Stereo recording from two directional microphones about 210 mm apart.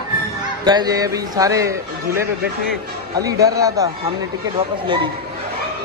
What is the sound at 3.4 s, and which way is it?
Speech, 15° right (ahead or behind).